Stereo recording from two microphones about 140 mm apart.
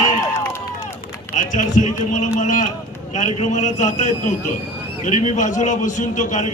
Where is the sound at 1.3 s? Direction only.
65° left (ahead or behind).